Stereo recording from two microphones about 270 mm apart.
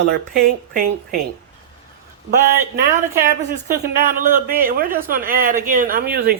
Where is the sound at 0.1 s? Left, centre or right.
Right.